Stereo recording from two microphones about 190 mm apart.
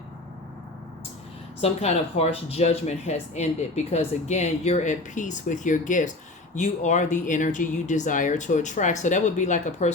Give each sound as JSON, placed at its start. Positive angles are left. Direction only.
{"t": 1.6, "sound": "speech", "side_deg": 35}